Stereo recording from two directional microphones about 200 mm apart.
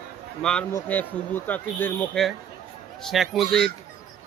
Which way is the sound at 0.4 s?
10° left (ahead or behind).